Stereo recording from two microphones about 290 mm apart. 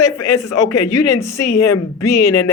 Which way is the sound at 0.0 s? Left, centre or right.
Left.